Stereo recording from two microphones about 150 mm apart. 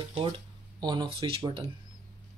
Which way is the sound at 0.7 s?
25° right (ahead or behind).